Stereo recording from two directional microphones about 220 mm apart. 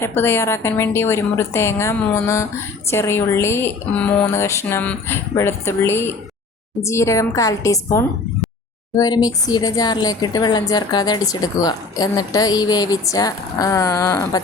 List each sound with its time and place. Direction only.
0.0 s a woman's voice: 10° left (ahead or behind)